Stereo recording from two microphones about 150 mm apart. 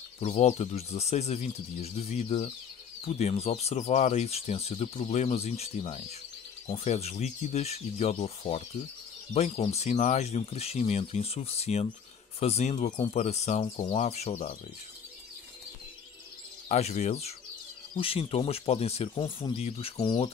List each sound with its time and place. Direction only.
0.2 s speech: 50° left (ahead or behind)
16.6 s speech: 50° left (ahead or behind)